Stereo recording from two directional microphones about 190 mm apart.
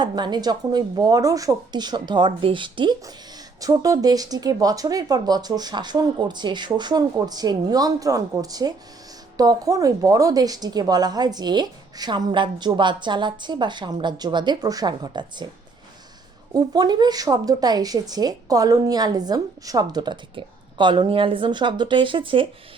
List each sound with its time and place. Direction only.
0.0 s speech: 20° right (ahead or behind)
16.5 s speech: 20° right (ahead or behind)